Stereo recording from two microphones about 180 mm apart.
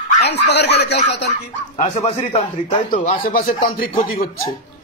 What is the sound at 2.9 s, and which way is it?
Speech, 50° left (ahead or behind).